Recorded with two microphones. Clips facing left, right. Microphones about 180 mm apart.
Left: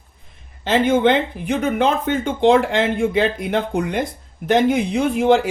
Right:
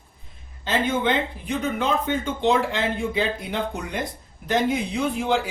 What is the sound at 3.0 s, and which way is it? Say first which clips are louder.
Speech: left 7 dB; 70° left (ahead or behind).